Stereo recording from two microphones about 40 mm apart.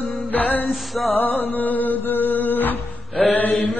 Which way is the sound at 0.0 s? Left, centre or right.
Left.